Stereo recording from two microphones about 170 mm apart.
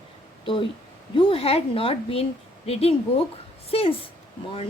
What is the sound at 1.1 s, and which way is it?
Speech, 30° left (ahead or behind).